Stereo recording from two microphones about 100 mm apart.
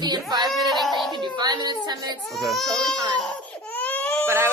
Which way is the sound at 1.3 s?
40° right (ahead or behind).